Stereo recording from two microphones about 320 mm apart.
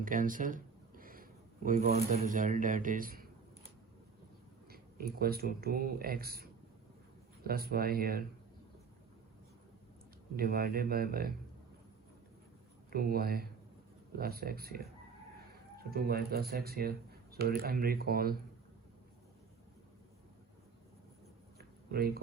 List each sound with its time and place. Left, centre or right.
0.0 s a sound: right
4.7 s speech: right
10.3 s speech: right
12.9 s speech: right
15.9 s speech: right
21.6 s a sound: right